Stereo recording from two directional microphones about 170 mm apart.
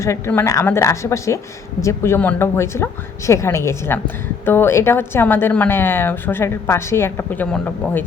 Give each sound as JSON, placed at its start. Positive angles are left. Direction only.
{"t": 0.0, "sound": "a woman's voice", "side_deg": 15}